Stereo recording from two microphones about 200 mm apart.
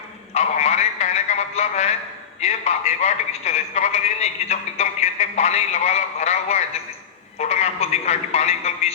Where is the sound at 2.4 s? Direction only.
35° left (ahead or behind).